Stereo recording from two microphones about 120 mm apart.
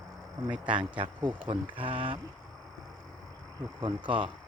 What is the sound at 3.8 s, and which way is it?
Speech, 45° right (ahead or behind).